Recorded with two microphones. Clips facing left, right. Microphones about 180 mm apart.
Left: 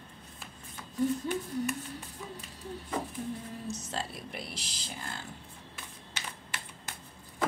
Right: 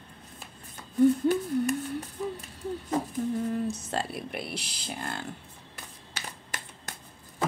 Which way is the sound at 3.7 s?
60° right (ahead or behind).